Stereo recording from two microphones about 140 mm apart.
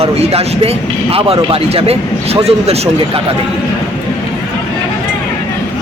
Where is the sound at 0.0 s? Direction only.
45° right (ahead or behind).